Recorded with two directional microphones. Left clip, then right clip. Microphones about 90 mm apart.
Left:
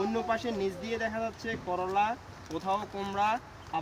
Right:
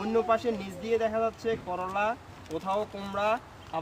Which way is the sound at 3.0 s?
20° right (ahead or behind).